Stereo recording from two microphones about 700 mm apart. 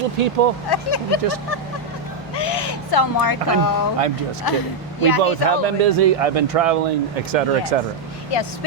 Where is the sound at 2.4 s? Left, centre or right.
Left.